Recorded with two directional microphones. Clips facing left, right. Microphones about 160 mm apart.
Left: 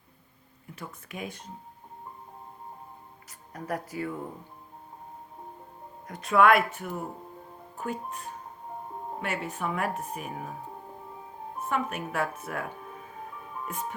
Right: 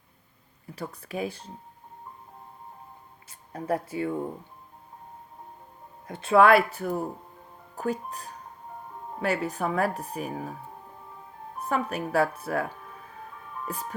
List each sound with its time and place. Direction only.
0.8 s speech: 35° right (ahead or behind)
3.2 s speech: 30° right (ahead or behind)
6.1 s speech: 30° right (ahead or behind)
11.7 s speech: 35° right (ahead or behind)